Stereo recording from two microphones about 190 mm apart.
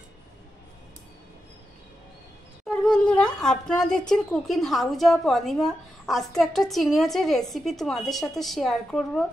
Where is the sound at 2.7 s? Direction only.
5° left (ahead or behind).